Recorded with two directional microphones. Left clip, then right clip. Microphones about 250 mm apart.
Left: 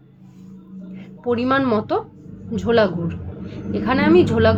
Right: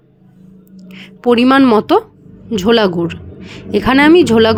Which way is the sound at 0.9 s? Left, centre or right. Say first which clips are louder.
Right 10 dB; right.